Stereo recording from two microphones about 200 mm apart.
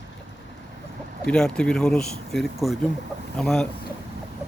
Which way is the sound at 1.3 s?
5° left (ahead or behind).